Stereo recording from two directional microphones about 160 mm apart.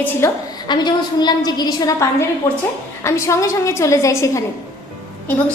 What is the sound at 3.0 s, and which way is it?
A woman's voice, 20° left (ahead or behind).